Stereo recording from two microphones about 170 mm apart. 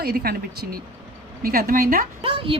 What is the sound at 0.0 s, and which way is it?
Speech, 65° right (ahead or behind).